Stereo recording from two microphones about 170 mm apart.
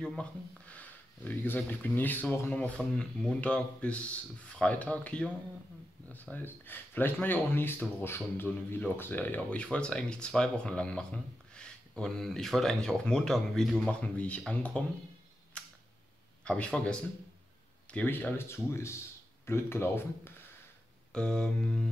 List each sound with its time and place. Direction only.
0.0 s speech: 5° left (ahead or behind)
15.5 s camera: 5° left (ahead or behind)
16.4 s mantra: 5° left (ahead or behind)
17.9 s speech: 10° left (ahead or behind)
21.1 s mantra: 5° left (ahead or behind)